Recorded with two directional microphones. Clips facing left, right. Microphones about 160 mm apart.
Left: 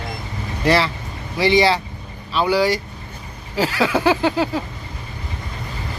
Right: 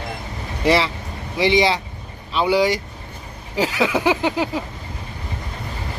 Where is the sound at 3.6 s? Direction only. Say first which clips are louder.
Left 1 dB; 20° right (ahead or behind).